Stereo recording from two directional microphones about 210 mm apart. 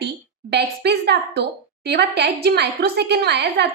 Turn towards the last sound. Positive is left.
turn(degrees=-55)  # may be behind; listen again after turning